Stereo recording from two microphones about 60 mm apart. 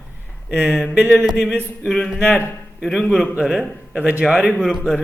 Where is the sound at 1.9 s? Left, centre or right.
Centre.